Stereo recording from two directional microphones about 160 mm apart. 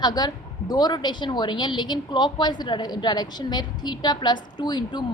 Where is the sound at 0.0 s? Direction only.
25° left (ahead or behind).